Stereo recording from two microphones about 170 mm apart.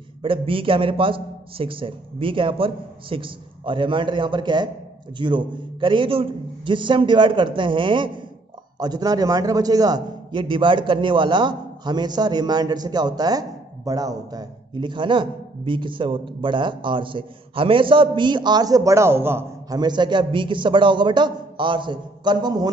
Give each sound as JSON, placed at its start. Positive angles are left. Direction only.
{"t": 0.2, "sound": "a man's voice", "side_deg": -30}
{"t": 19.8, "sound": "a man's voice", "side_deg": -25}